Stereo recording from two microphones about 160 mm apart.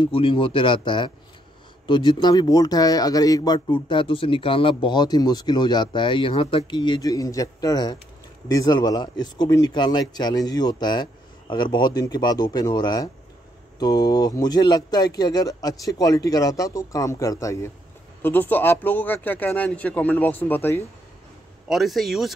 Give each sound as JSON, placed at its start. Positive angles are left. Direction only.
{"t": 0.0, "sound": "a man's voice", "side_deg": 35}
{"t": 21.6, "sound": "speech", "side_deg": 0}